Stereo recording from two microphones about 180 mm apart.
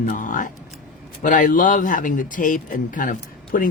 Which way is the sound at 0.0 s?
45° left (ahead or behind).